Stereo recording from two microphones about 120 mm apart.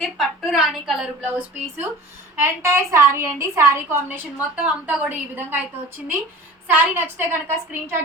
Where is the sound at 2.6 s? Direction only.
20° right (ahead or behind).